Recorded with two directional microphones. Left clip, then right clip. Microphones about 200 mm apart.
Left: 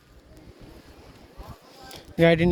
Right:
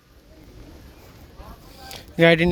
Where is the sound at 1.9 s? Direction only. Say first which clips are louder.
Right 3 dB; 10° left (ahead or behind).